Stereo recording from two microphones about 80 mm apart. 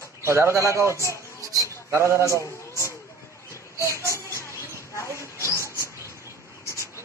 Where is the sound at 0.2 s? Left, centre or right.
Right.